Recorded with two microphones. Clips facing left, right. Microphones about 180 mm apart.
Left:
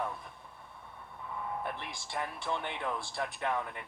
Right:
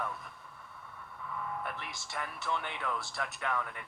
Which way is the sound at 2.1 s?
25° left (ahead or behind).